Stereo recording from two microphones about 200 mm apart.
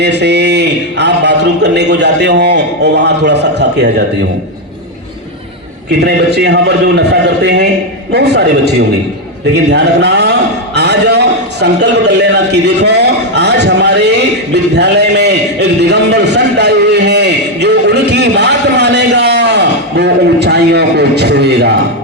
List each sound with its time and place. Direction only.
0.0 s speech: 60° right (ahead or behind)
5.9 s speech: 55° right (ahead or behind)
10.8 s a sound: 55° right (ahead or behind)